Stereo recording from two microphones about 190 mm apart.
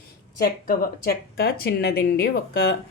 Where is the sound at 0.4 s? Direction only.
50° left (ahead or behind).